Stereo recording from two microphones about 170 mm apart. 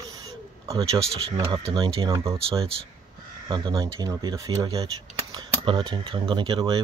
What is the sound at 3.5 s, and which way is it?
Speech, 25° right (ahead or behind).